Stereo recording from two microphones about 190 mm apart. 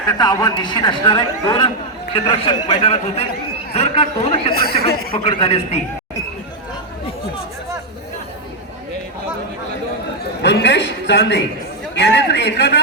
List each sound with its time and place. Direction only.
0.1 s a woman's voice: 20° left (ahead or behind)
10.4 s a sound: 65° left (ahead or behind)
11.9 s a man's voice: 65° left (ahead or behind)